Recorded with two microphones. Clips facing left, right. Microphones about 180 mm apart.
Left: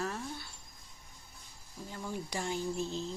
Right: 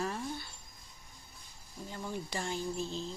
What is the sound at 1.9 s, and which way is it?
Speech, 5° right (ahead or behind).